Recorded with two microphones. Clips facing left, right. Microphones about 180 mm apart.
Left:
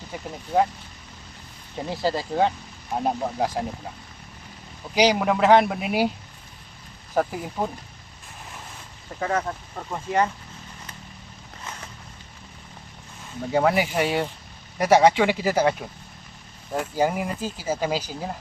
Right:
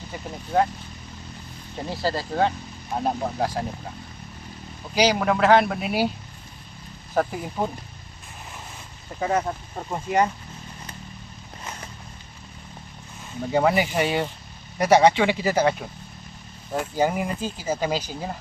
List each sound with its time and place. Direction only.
0.1 s speech: 5° left (ahead or behind)
1.9 s speech: 20° left (ahead or behind)
4.9 s speech: 20° left (ahead or behind)
7.1 s speech: 5° left (ahead or behind)
9.2 s speech: 15° right (ahead or behind)
13.5 s speech: centre (ahead or behind)